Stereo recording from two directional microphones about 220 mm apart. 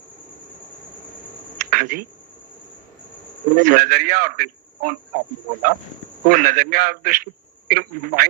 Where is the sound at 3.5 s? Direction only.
40° right (ahead or behind).